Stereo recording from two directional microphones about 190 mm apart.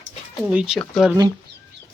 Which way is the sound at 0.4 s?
5° right (ahead or behind).